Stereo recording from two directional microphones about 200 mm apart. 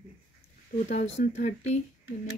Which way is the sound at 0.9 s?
35° left (ahead or behind).